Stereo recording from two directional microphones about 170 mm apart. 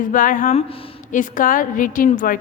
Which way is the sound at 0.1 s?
50° left (ahead or behind).